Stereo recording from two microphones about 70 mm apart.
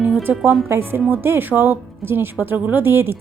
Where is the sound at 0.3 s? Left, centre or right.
Right.